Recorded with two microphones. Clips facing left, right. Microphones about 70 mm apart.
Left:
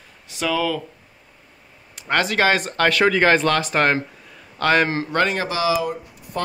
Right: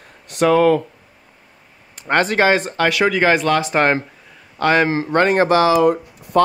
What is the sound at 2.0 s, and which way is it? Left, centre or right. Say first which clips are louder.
Speech: right 3 dB; right.